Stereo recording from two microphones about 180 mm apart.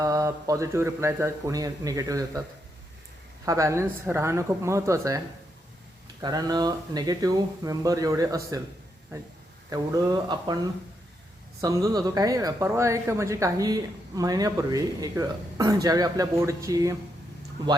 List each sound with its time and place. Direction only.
0.0 s speech: 20° right (ahead or behind)
3.4 s speech: 15° right (ahead or behind)
6.2 s speech: 20° right (ahead or behind)
9.6 s speech: 20° right (ahead or behind)
11.6 s speech: 20° right (ahead or behind)